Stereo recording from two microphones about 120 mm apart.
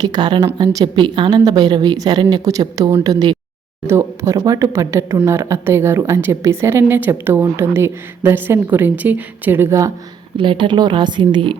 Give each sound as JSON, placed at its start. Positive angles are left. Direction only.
{"t": 0.0, "sound": "a woman's voice", "side_deg": -35}
{"t": 3.8, "sound": "speech", "side_deg": -25}
{"t": 10.3, "sound": "a woman's voice", "side_deg": -45}